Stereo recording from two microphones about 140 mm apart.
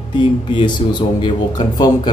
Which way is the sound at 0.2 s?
35° left (ahead or behind).